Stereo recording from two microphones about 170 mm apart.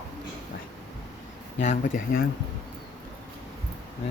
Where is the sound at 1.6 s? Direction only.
50° left (ahead or behind).